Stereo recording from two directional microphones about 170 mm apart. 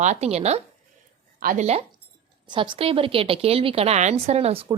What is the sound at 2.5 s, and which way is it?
A woman's voice, 30° right (ahead or behind).